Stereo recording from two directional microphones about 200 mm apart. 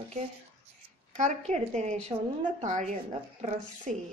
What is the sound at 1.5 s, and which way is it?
Speech, 35° right (ahead or behind).